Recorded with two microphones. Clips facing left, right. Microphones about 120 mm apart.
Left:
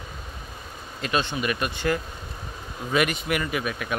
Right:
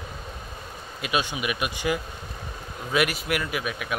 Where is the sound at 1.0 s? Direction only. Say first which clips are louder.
Left 1 dB; 10° right (ahead or behind).